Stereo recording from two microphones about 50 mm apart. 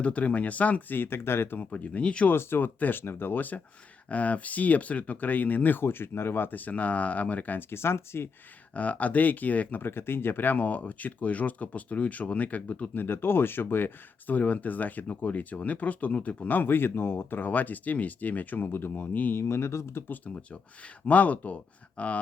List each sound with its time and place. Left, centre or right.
0.0 s speech: left
0.9 s speech: left
1.7 s speech: left
2.3 s speech: left
3.0 s speech: left
5.8 s speech: left
7.7 s speech: left
8.7 s speech: left
9.8 s speech: left
12.9 s speech: left
19.1 s speech: left
19.4 s speech: left
21.1 s speech: left